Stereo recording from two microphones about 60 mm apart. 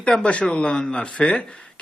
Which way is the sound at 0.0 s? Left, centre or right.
Centre.